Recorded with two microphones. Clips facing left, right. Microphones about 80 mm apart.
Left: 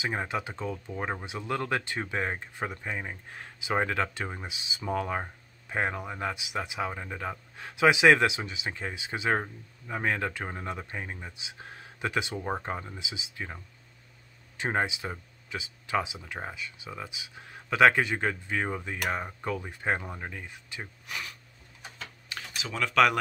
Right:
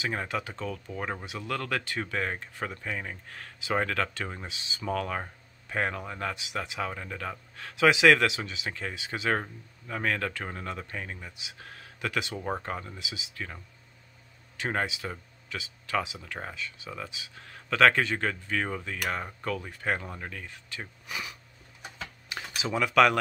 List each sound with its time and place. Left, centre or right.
0.0 s speech: centre
14.6 s speech: left
21.1 s speech: centre
22.3 s computer keyboard: centre